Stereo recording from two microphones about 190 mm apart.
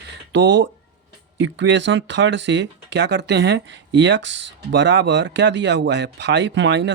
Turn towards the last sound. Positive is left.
turn(degrees=-70)  # may be behind; listen again after turning